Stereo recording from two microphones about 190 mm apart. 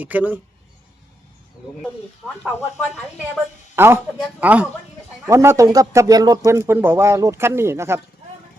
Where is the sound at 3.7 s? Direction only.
15° right (ahead or behind).